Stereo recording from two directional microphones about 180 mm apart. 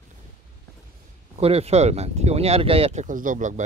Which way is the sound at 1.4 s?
35° right (ahead or behind).